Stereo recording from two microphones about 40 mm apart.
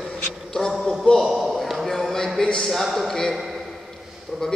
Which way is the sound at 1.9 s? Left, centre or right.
Centre.